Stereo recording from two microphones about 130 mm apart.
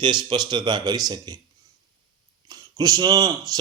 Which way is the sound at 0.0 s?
35° right (ahead or behind).